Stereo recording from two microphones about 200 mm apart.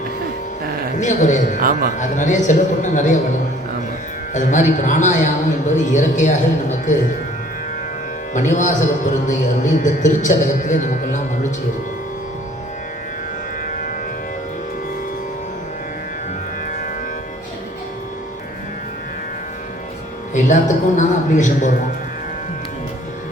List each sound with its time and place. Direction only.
0.9 s a man's voice: 35° left (ahead or behind)
4.4 s a man's voice: 40° left (ahead or behind)
8.3 s a man's voice: 40° left (ahead or behind)
20.3 s a man's voice: 40° left (ahead or behind)